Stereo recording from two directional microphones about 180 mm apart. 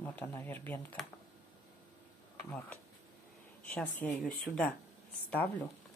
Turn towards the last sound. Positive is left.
turn(degrees=10)  # may be behind; listen again after turning